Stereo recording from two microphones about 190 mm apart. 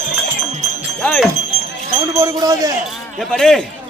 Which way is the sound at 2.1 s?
15° right (ahead or behind).